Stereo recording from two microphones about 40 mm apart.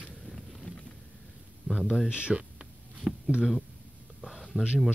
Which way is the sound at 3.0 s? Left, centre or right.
Centre.